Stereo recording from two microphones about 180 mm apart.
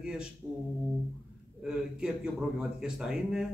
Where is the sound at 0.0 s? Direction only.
5° right (ahead or behind).